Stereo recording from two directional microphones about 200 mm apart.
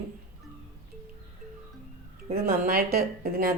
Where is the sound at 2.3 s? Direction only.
50° right (ahead or behind).